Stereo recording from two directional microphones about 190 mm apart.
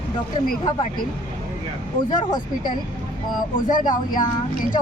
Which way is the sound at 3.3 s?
45° left (ahead or behind).